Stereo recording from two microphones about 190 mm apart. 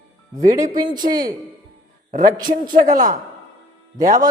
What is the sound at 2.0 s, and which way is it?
A man's voice, 45° right (ahead or behind).